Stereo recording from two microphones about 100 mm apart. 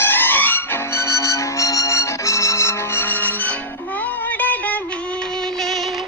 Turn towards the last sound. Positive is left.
turn(degrees=15)  # may be behind; listen again after turning